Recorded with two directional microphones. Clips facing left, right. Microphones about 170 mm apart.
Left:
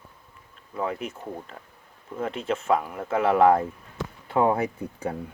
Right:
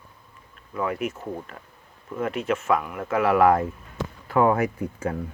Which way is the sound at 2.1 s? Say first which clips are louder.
Right 2 dB; 30° left (ahead or behind).